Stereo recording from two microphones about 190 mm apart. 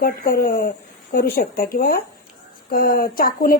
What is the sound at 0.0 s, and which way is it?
A woman's voice, 50° left (ahead or behind).